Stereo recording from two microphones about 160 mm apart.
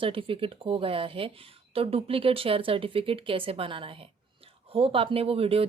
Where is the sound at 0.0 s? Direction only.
35° right (ahead or behind).